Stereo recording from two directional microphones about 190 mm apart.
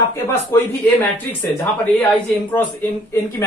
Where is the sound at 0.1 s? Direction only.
10° left (ahead or behind).